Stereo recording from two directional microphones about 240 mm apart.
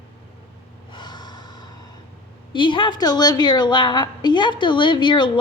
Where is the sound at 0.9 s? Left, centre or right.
Centre.